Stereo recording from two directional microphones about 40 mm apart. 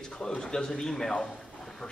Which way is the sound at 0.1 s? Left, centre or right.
Centre.